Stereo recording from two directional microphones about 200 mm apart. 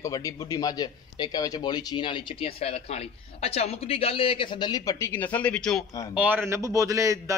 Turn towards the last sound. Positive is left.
turn(degrees=-15)  # may be behind; listen again after turning